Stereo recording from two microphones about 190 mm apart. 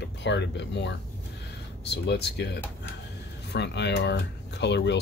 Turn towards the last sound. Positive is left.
turn(degrees=65)  # may be behind; listen again after turning